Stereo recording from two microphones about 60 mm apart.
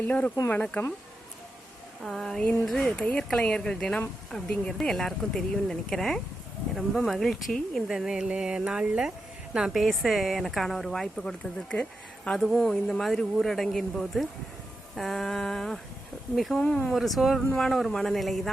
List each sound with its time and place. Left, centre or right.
0.0 s speech: left
2.0 s speech: centre
2.6 s speech: centre
2.9 s speech: centre
7.9 s speech: centre
16.6 s speech: centre
16.8 s speech: centre
17.4 s speech: centre